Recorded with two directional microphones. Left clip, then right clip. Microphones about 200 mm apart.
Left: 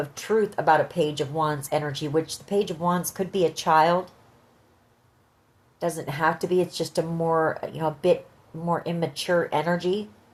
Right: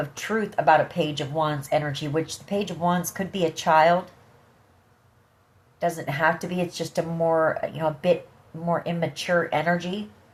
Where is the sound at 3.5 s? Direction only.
40° left (ahead or behind).